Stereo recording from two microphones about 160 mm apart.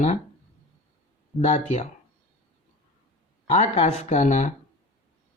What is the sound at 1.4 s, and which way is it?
Speech, 50° left (ahead or behind).